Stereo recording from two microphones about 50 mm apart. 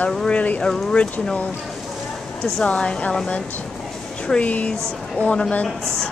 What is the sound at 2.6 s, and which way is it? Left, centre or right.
Speech, centre.